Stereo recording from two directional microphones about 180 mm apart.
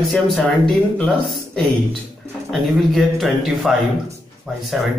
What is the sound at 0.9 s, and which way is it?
Speech, 5° left (ahead or behind).